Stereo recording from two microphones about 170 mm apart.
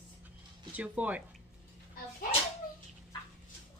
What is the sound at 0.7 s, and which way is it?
Speech, 10° right (ahead or behind).